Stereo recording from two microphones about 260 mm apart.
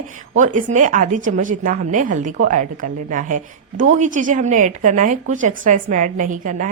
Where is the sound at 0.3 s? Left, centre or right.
Right.